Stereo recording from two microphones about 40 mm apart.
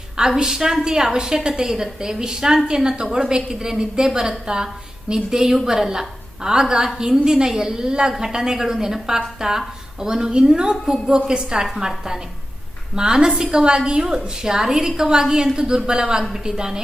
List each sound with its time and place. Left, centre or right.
0.2 s a woman's voice: centre